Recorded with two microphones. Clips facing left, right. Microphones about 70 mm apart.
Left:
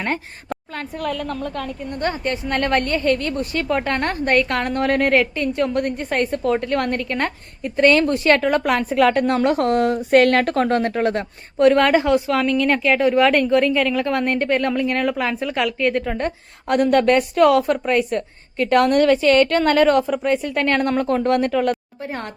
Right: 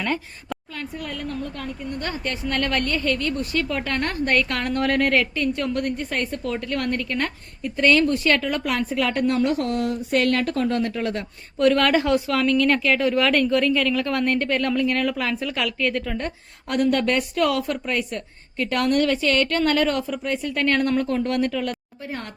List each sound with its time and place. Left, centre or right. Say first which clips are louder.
0.5 s a woman's voice: left 3 dB; left
1.0 s a woman's voice: left 7 dB; left
1.9 s a woman's voice: left 6 dB; left